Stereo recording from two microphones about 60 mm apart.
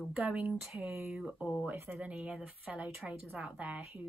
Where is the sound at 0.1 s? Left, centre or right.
Right.